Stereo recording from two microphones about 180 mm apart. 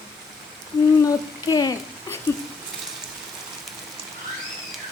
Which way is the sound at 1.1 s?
20° left (ahead or behind).